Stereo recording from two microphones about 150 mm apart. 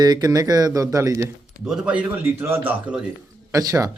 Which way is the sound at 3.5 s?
25° right (ahead or behind).